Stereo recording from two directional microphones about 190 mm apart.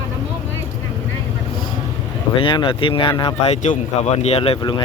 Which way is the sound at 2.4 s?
25° left (ahead or behind).